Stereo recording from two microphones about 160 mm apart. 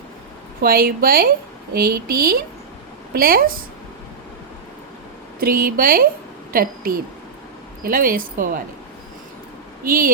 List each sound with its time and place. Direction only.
0.6 s a woman's voice: 65° right (ahead or behind)
5.4 s a woman's voice: 65° right (ahead or behind)
9.8 s speech: 60° right (ahead or behind)